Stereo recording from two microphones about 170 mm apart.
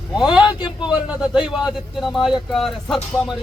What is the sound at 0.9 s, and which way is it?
A man's voice, 5° right (ahead or behind).